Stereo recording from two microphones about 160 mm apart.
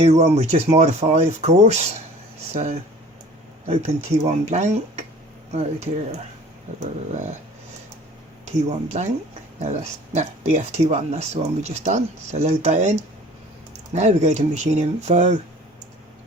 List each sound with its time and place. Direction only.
0.0 s speech: 40° right (ahead or behind)
8.4 s speech: 45° right (ahead or behind)